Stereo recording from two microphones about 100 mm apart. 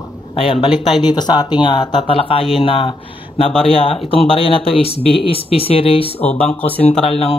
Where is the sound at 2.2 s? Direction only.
65° left (ahead or behind).